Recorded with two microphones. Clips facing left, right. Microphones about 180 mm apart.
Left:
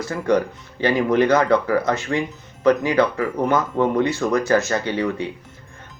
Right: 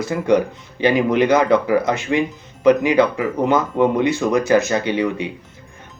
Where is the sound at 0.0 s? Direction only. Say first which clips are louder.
Right 3 dB; 15° right (ahead or behind).